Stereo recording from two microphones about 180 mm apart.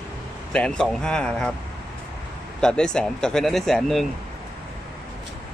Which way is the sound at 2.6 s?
5° left (ahead or behind).